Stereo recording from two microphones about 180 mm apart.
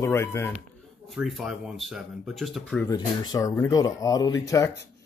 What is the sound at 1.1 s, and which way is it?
Speech, centre (ahead or behind).